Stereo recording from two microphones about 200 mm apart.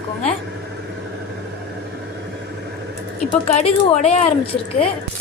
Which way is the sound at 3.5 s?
35° left (ahead or behind).